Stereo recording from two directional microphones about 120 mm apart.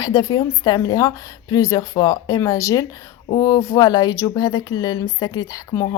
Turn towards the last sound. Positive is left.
turn(degrees=30)  # may be behind; listen again after turning